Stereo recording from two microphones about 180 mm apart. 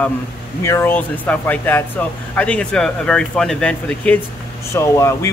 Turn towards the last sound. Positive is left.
turn(degrees=15)  # may be behind; listen again after turning